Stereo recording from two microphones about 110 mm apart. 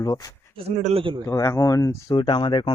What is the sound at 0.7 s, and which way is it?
Speech, 80° right.